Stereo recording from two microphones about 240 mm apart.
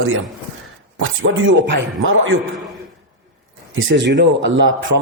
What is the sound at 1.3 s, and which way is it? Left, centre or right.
Speech, right.